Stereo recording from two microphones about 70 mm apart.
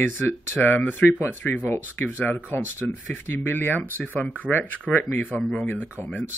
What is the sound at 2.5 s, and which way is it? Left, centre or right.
Speech, left.